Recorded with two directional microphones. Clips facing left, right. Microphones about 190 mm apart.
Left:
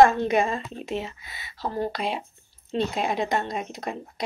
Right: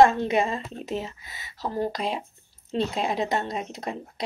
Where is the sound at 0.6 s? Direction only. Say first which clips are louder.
Even; 40° right (ahead or behind).